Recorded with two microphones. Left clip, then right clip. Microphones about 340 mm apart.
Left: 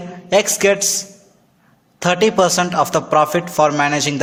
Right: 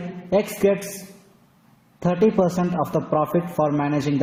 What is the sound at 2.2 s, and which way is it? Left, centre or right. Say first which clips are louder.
A man's voice: left 5 dB; left.